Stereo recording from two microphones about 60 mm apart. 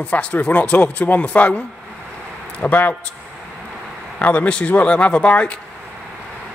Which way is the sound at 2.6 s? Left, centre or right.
Left.